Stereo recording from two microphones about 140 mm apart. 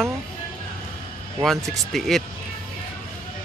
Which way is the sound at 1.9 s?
Centre (ahead or behind).